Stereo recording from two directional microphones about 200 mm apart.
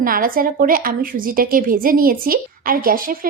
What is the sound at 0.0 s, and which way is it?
A woman's voice, 45° right (ahead or behind).